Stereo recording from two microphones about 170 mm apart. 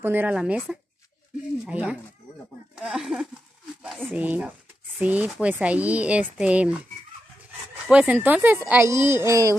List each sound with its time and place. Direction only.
0.0 s speech: 10° right (ahead or behind)
7.9 s speech: 10° right (ahead or behind)